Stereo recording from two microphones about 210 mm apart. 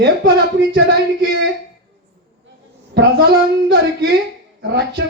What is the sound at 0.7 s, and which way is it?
Speech, 50° right (ahead or behind).